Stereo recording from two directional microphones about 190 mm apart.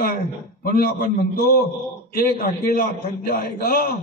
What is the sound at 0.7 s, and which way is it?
A man's voice, 50° left (ahead or behind).